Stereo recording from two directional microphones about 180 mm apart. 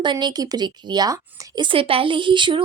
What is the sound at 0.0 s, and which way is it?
Speech, 25° right (ahead or behind).